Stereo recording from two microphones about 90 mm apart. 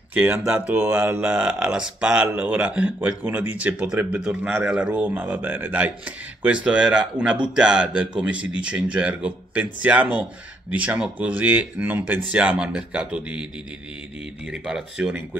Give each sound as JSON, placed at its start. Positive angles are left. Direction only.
{"t": 0.1, "sound": "a man's voice", "side_deg": -20}
{"t": 0.7, "sound": "speech", "side_deg": -25}
{"t": 1.2, "sound": "a man's voice", "side_deg": -10}
{"t": 14.5, "sound": "a man's voice", "side_deg": -10}